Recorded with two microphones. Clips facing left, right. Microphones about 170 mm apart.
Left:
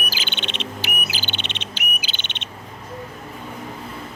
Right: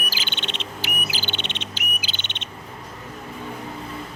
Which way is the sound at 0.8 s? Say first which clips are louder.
Left 1 dB; 70° left (ahead or behind).